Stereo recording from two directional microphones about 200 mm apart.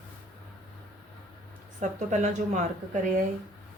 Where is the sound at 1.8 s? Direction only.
35° right (ahead or behind).